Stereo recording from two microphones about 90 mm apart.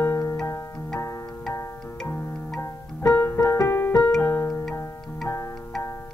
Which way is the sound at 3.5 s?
30° left (ahead or behind).